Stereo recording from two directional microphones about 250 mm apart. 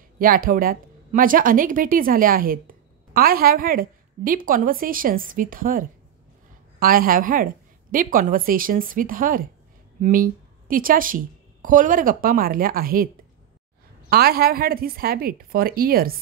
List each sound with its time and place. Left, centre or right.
0.2 s a woman's voice: right